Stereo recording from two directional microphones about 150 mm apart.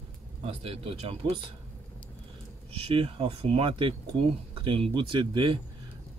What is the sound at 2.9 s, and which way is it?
Speech, 40° right (ahead or behind).